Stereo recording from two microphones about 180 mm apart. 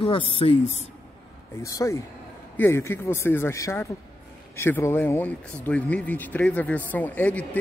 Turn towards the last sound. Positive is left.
turn(degrees=10)  # may be behind; listen again after turning